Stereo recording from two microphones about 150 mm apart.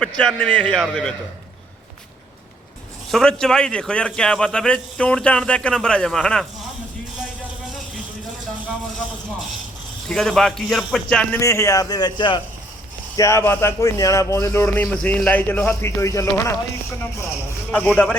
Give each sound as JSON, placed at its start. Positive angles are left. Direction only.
{"t": 0.0, "sound": "a man's voice", "side_deg": 5}
{"t": 3.1, "sound": "a man's voice", "side_deg": 5}
{"t": 10.1, "sound": "a man's voice", "side_deg": 5}
{"t": 11.3, "sound": "speech", "side_deg": 20}
{"t": 13.1, "sound": "speech", "side_deg": 20}
{"t": 17.7, "sound": "speech", "side_deg": 10}